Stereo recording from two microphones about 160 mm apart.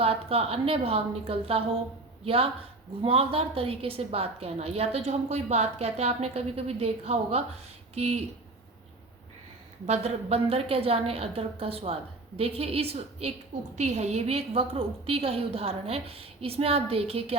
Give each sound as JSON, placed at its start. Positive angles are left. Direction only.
{"t": 0.0, "sound": "a woman's voice", "side_deg": -35}
{"t": 9.8, "sound": "a woman's voice", "side_deg": -40}